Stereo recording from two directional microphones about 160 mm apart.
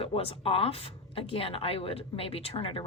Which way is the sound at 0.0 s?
35° left (ahead or behind).